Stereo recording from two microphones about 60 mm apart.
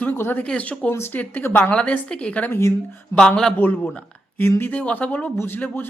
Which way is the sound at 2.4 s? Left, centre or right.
Left.